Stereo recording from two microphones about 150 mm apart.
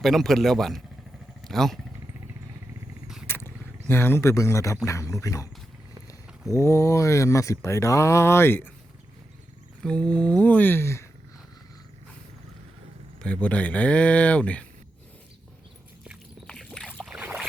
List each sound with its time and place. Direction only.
0.0 s a man's voice: centre (ahead or behind)
3.2 s a sound: 15° left (ahead or behind)
4.9 s speech: 20° left (ahead or behind)
6.5 s speech: 20° left (ahead or behind)
9.8 s speech: 5° left (ahead or behind)
13.2 s speech: 10° left (ahead or behind)
16.5 s boat: 5° left (ahead or behind)
17.1 s boat: 5° right (ahead or behind)